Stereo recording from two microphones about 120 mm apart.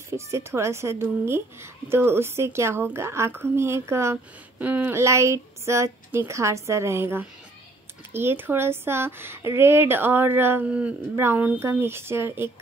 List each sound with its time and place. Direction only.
0.1 s a woman's voice: 25° right (ahead or behind)